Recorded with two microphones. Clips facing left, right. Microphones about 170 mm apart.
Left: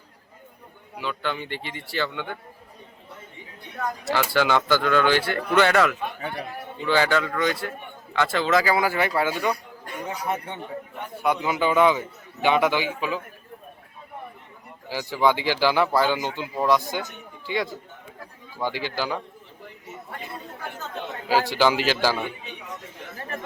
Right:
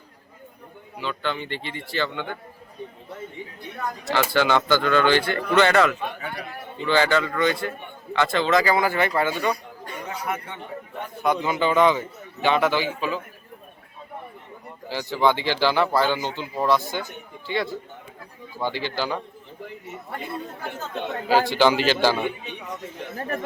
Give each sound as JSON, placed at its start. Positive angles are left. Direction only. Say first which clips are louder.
{"t": 0.9, "sound": "speech", "louder": "right 1 dB", "side_deg": 10}
{"t": 4.4, "sound": "a man's voice", "louder": "right 1 dB", "side_deg": 5}
{"t": 10.2, "sound": "speech", "louder": "left 2 dB", "side_deg": 25}
{"t": 11.2, "sound": "speech", "louder": "right 1 dB", "side_deg": 10}
{"t": 14.8, "sound": "a man's voice", "louder": "even", "side_deg": 10}
{"t": 21.2, "sound": "a man's voice", "louder": "right 2 dB", "side_deg": 5}
{"t": 23.1, "sound": "speech", "louder": "right 5 dB", "side_deg": -40}